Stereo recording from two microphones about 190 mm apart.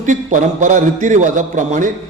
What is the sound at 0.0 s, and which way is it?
A man's voice, 40° right (ahead or behind).